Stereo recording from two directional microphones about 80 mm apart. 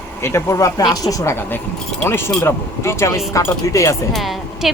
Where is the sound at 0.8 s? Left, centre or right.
Left.